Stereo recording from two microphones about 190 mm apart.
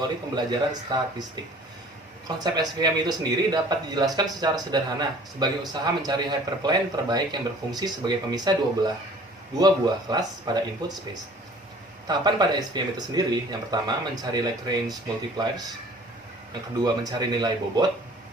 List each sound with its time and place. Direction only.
0.3 s speech: 20° right (ahead or behind)
2.2 s speech: 20° right (ahead or behind)
16.8 s speech: 20° right (ahead or behind)